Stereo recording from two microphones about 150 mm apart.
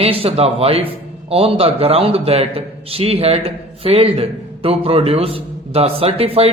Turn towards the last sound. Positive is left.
turn(degrees=-40)  # may be behind; listen again after turning